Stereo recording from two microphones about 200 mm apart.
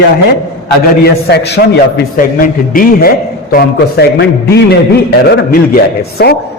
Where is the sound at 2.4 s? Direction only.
45° left (ahead or behind).